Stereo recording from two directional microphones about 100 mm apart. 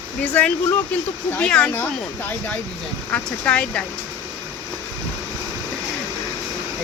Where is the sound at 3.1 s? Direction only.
10° left (ahead or behind).